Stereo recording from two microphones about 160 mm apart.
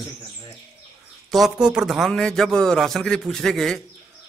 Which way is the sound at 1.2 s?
Centre (ahead or behind).